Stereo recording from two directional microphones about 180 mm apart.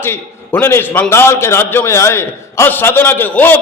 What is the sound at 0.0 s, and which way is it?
A man's voice, 10° left (ahead or behind).